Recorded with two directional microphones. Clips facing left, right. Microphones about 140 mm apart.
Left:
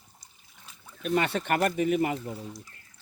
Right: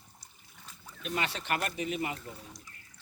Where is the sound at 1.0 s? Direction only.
50° left (ahead or behind).